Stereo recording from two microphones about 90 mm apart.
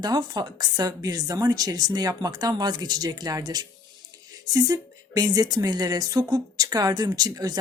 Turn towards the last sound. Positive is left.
turn(degrees=-40)  # may be behind; listen again after turning